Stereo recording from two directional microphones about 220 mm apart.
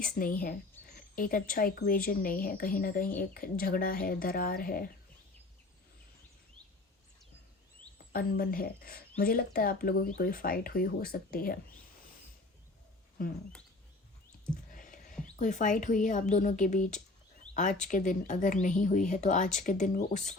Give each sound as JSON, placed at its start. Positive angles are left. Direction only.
{"t": 0.0, "sound": "a woman's voice", "side_deg": 40}
{"t": 8.1, "sound": "a woman's voice", "side_deg": 40}
{"t": 14.7, "sound": "a sound", "side_deg": 35}
{"t": 15.4, "sound": "a woman's voice", "side_deg": 35}